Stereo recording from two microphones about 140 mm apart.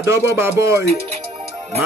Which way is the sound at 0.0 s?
20° right (ahead or behind).